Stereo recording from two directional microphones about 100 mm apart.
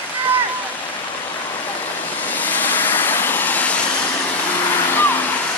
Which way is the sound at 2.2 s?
15° left (ahead or behind).